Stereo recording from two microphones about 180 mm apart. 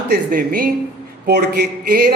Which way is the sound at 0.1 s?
50° right (ahead or behind).